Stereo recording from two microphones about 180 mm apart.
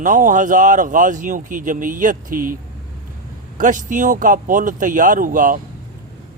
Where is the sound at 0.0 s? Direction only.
45° right (ahead or behind).